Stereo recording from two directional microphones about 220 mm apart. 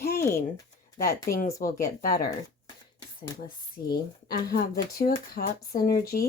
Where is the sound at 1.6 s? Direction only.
40° left (ahead or behind).